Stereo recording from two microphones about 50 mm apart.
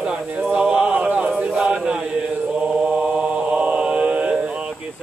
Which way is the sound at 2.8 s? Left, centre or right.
Right.